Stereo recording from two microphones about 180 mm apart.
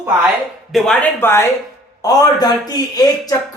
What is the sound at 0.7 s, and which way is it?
Speech, centre (ahead or behind).